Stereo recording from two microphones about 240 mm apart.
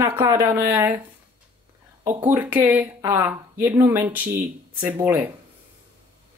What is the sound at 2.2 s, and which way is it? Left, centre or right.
Speech, centre.